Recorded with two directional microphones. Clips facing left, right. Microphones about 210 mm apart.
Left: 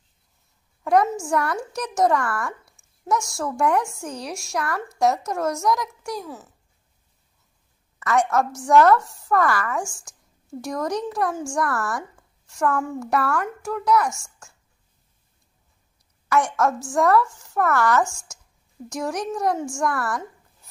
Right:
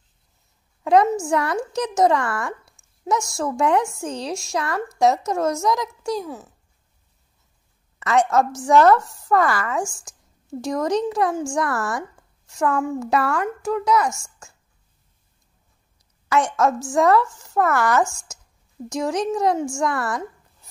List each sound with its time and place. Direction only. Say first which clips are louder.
1.2 s speech: right 2 dB; 20° right (ahead or behind)
8.0 s speech: right 2 dB; 20° right (ahead or behind)
16.3 s speech: right 2 dB; 20° right (ahead or behind)